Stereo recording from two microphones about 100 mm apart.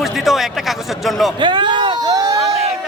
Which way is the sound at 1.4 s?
50° right (ahead or behind).